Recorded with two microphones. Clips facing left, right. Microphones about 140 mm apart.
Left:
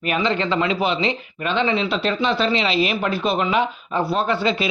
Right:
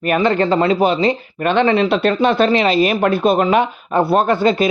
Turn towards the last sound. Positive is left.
turn(degrees=-50)  # may be behind; listen again after turning